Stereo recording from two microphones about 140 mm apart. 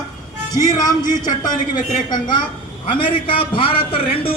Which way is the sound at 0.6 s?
25° left (ahead or behind).